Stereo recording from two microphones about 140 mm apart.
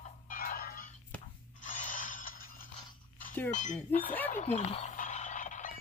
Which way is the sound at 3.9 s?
90° left.